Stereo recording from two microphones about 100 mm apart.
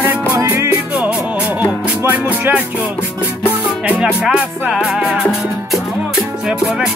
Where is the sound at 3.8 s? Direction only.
10° right (ahead or behind).